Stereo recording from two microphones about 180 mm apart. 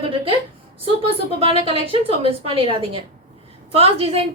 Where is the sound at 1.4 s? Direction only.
30° right (ahead or behind).